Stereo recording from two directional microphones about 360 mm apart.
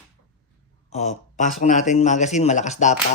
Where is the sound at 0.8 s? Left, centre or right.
Centre.